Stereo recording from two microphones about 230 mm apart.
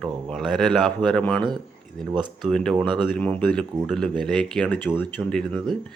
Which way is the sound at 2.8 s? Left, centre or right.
Centre.